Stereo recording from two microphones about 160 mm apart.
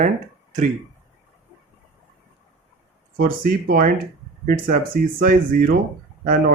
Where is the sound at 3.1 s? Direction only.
65° right (ahead or behind).